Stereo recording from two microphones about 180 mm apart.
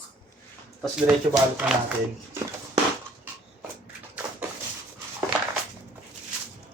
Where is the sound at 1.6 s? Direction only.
5° right (ahead or behind).